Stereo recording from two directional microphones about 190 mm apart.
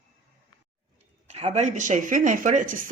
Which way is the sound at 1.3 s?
35° right (ahead or behind).